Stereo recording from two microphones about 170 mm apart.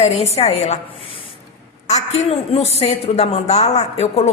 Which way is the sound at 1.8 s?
40° left (ahead or behind).